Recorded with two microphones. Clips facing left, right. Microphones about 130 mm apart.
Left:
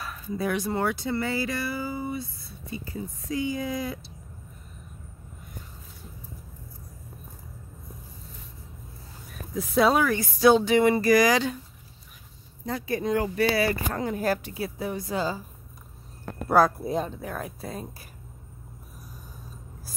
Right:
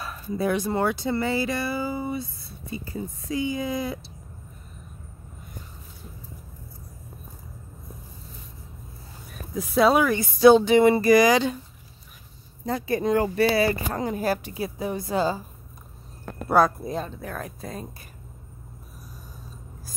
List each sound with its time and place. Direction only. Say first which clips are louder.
0.0 s speech: right 3 dB; 30° right (ahead or behind)
3.3 s speech: right 2 dB; 20° right (ahead or behind)
9.9 s speech: right 2 dB; 20° right (ahead or behind)
12.6 s speech: right 3 dB; 40° right (ahead or behind)
14.1 s speech: right 1 dB; 10° right (ahead or behind); by 15.4 s 30° right (ahead or behind)
16.4 s speech: right 1 dB; centre (ahead or behind)
16.9 s speech: left 2 dB; 15° left (ahead or behind)